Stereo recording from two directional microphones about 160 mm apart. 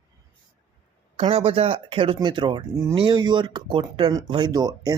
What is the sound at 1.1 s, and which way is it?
Speech, 35° right (ahead or behind).